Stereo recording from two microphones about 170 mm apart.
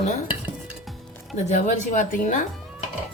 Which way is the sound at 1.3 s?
45° left (ahead or behind).